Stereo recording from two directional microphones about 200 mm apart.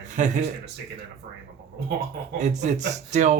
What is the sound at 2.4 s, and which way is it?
Speech, 35° right (ahead or behind).